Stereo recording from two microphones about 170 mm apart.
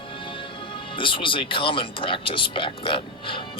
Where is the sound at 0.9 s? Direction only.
30° left (ahead or behind).